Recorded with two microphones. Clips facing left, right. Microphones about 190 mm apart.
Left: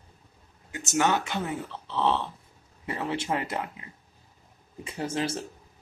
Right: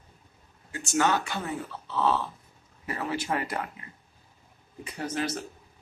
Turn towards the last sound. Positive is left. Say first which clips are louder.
# left 1 dB
turn(degrees=25)  # may be behind; listen again after turning